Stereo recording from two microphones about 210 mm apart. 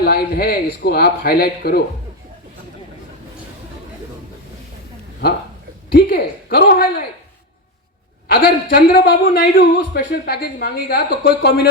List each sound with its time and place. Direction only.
0.0 s a man's voice: 50° left (ahead or behind)
5.9 s a man's voice: 45° left (ahead or behind)
8.3 s a man's voice: 45° left (ahead or behind)